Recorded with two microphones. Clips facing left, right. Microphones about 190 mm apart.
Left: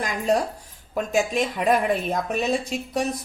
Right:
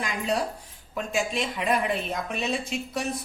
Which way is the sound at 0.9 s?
45° left (ahead or behind).